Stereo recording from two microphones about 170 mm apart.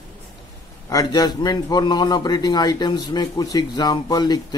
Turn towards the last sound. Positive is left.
turn(degrees=25)  # may be behind; listen again after turning